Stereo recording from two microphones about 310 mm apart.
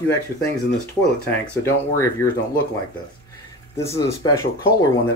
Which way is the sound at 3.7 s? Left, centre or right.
Centre.